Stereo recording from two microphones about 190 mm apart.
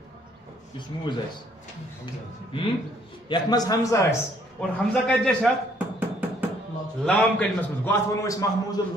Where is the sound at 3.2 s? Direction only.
20° left (ahead or behind).